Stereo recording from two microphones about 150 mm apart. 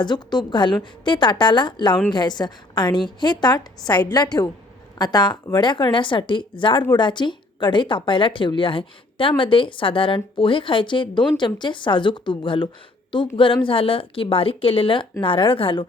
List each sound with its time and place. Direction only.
0.0 s a woman's voice: 30° left (ahead or behind)